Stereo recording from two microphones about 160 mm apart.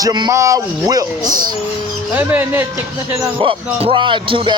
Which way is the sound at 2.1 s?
10° right (ahead or behind).